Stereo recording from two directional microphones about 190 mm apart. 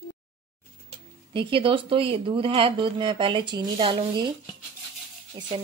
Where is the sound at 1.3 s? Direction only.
25° right (ahead or behind).